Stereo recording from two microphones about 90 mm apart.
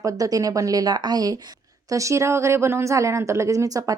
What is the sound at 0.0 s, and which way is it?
Speech, 40° right (ahead or behind).